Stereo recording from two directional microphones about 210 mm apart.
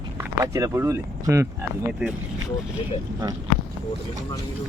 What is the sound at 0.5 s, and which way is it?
Speech, 15° right (ahead or behind).